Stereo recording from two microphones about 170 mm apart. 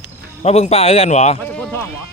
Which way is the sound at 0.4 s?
40° left (ahead or behind).